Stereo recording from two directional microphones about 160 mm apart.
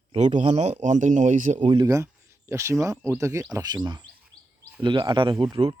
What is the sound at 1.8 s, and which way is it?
Speech, 20° right (ahead or behind).